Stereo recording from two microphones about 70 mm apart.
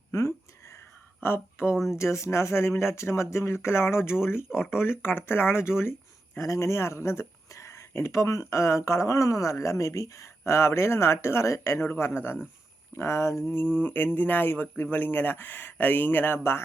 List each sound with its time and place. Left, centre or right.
0.1 s a sound: left
1.2 s speech: left
4.4 s speech: centre
4.7 s speech: left
6.4 s speech: left